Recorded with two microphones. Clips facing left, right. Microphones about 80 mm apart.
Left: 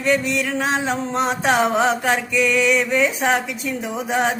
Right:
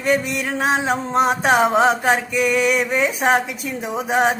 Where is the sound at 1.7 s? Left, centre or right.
Right.